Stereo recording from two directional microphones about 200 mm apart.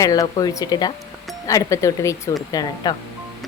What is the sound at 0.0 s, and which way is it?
Speech, 15° left (ahead or behind).